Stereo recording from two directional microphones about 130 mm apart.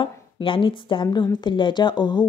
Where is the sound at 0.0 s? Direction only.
40° left (ahead or behind).